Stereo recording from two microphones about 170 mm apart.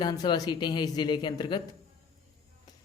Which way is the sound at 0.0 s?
25° left (ahead or behind).